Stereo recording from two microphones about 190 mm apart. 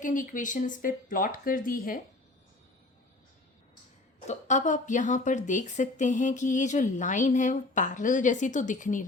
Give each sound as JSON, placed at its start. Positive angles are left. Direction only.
{"t": 0.0, "sound": "speech", "side_deg": 45}
{"t": 4.3, "sound": "speech", "side_deg": 40}